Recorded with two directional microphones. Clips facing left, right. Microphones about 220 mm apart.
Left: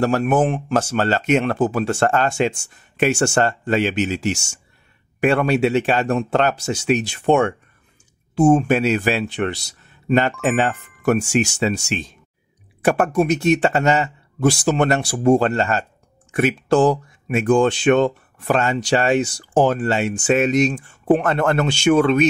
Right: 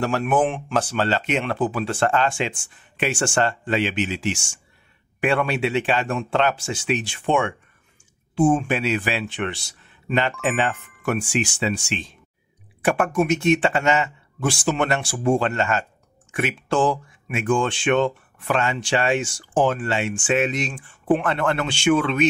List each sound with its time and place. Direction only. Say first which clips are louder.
0.0 s speech: left 3 dB; 40° left (ahead or behind)